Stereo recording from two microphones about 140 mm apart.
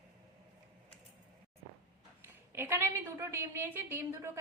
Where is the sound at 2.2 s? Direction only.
15° right (ahead or behind).